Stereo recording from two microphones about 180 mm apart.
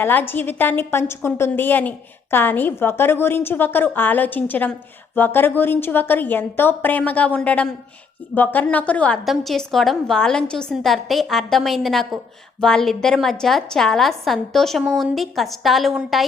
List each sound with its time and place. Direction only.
0.0 s a woman's voice: 10° left (ahead or behind)